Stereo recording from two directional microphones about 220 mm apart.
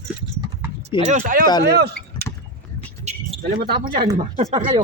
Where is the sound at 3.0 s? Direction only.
30° right (ahead or behind).